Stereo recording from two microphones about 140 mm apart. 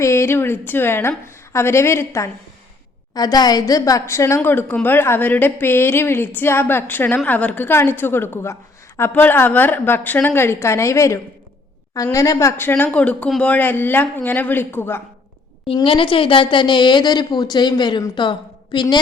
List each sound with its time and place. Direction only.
0.0 s a woman's voice: 20° left (ahead or behind)
15.6 s a woman's voice: 40° left (ahead or behind)